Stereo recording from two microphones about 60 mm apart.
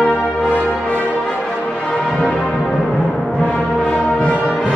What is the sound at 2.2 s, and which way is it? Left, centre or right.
Music, centre.